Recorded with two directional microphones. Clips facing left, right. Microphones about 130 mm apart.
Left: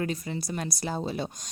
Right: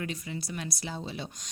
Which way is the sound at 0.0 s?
40° left (ahead or behind).